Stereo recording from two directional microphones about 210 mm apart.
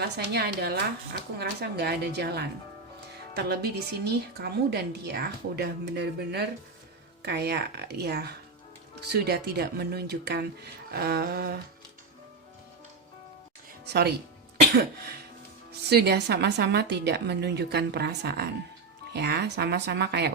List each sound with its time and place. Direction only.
0.0 s a woman's voice: 50° right (ahead or behind)
13.8 s speech: 50° right (ahead or behind)
15.9 s a woman's voice: 50° right (ahead or behind)